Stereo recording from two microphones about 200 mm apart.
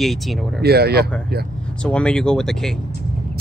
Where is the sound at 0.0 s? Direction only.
Centre (ahead or behind).